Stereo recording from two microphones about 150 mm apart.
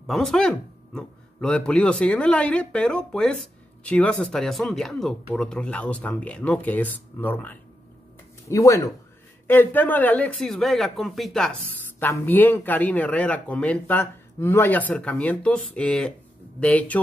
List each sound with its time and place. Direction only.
0.0 s speech: centre (ahead or behind)
12.0 s speech: 15° left (ahead or behind)